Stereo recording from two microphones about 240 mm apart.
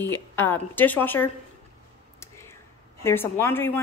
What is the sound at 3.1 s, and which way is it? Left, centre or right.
Speech, centre.